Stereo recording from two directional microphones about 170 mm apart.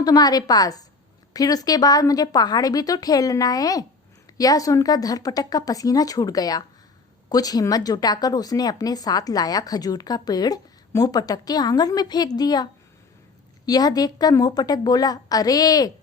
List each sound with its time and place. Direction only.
0.0 s speech: 20° left (ahead or behind)
13.7 s speech: 20° left (ahead or behind)